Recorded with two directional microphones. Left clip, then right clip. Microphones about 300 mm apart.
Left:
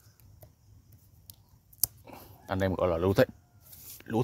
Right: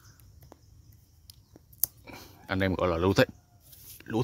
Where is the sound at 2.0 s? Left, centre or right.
Centre.